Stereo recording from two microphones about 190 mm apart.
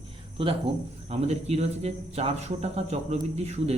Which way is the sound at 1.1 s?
35° right (ahead or behind).